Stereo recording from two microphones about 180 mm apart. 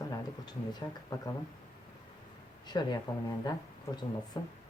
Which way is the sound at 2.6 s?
25° left (ahead or behind).